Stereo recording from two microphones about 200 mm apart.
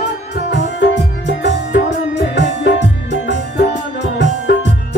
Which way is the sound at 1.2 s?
60° left (ahead or behind).